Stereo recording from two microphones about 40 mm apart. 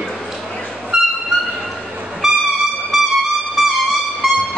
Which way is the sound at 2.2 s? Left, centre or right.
Centre.